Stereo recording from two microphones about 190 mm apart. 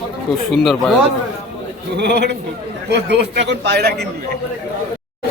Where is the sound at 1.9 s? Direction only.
65° right (ahead or behind).